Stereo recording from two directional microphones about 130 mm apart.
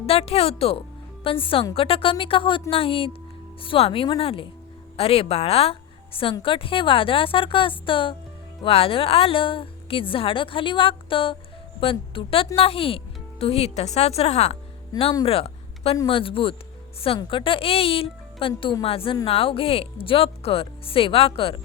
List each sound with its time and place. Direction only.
0.0 s a woman's voice: 45° left (ahead or behind)
15.2 s a sound: 50° left (ahead or behind)
16.0 s a woman's voice: 45° left (ahead or behind)